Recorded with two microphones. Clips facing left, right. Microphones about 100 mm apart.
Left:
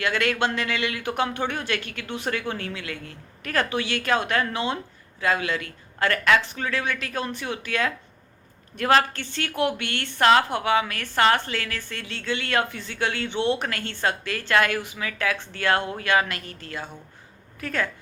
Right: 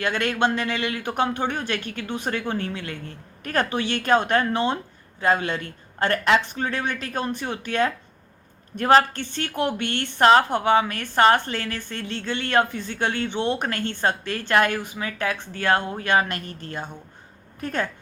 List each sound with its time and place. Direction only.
0.0 s a man's voice: 20° right (ahead or behind)